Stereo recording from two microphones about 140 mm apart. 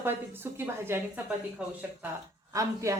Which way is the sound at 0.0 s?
15° right (ahead or behind).